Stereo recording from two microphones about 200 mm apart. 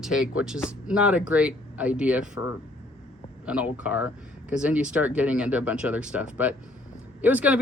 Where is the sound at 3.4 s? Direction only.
5° right (ahead or behind).